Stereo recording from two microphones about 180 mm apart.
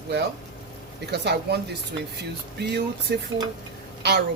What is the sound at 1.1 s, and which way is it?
Speech, 65° right (ahead or behind).